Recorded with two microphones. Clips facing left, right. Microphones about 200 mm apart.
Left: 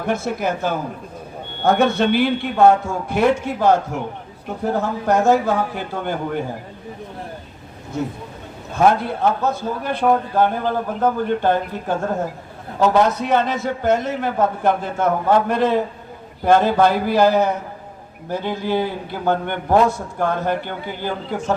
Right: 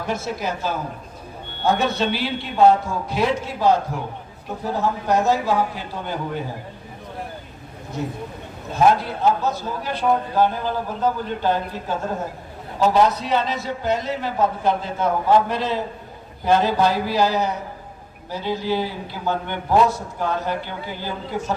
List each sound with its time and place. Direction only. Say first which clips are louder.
0.0 s a man's voice: left 4 dB; 55° left (ahead or behind)
8.9 s a man's voice: even; 55° left (ahead or behind)